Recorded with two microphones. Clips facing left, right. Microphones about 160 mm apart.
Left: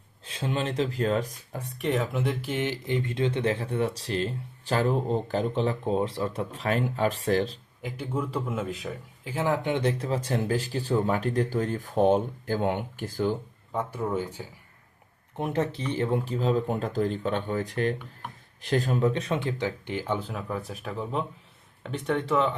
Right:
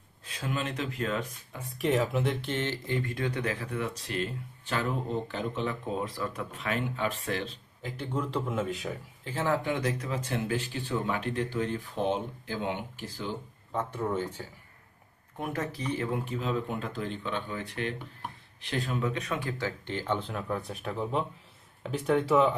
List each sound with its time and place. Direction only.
0.3 s speech: 25° left (ahead or behind)
1.8 s speech: centre (ahead or behind); by 7.6 s 35° left (ahead or behind)
7.8 s speech: 10° left (ahead or behind)
9.2 s speech: 10° left (ahead or behind); by 13.3 s 50° left (ahead or behind)
13.7 s speech: 10° left (ahead or behind)
15.4 s speech: 25° left (ahead or behind); by 22.5 s 10° right (ahead or behind)